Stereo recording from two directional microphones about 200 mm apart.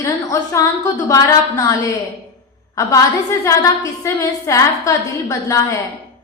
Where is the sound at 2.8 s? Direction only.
15° left (ahead or behind).